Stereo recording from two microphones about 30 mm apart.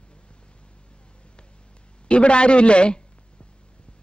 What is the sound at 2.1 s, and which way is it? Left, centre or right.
Speech, left.